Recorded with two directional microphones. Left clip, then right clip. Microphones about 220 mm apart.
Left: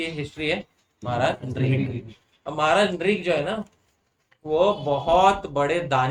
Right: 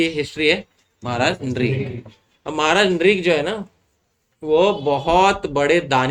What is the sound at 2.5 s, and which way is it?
Speech, 40° right (ahead or behind).